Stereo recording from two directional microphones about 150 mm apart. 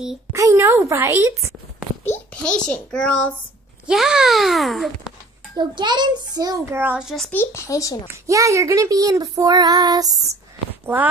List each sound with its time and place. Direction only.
0.3 s child singing: 20° right (ahead or behind)
2.4 s a child's voice: 5° left (ahead or behind)
5.6 s child singing: 30° right (ahead or behind); by 7.2 s 5° right (ahead or behind)
7.2 s speech: 15° left (ahead or behind)
8.3 s child singing: 20° right (ahead or behind)